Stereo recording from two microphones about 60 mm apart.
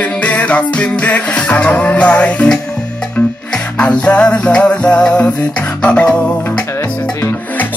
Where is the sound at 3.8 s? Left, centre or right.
Centre.